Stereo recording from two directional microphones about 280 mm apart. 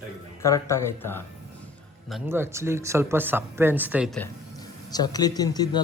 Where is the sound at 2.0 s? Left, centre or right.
Centre.